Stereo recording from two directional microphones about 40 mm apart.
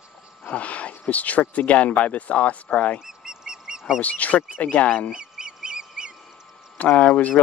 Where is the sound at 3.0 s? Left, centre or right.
Centre.